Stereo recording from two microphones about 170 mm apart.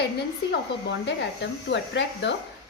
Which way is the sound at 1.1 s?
90° left.